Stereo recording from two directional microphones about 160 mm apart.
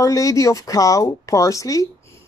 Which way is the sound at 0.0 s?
20° left (ahead or behind).